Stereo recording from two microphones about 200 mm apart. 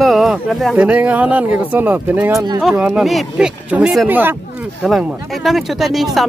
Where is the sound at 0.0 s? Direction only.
Centre (ahead or behind).